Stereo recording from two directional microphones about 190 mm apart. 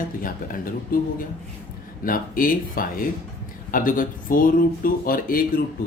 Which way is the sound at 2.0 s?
45° left (ahead or behind).